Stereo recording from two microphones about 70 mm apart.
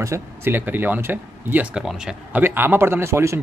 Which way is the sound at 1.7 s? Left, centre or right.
Centre.